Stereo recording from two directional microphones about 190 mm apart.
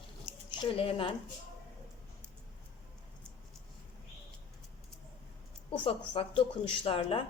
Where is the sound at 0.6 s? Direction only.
30° left (ahead or behind).